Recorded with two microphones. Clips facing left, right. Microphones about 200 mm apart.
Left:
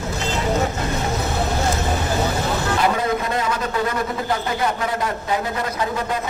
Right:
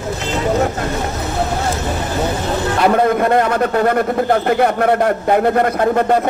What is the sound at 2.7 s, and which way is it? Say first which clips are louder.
A man's voice: right 9 dB; 60° right (ahead or behind).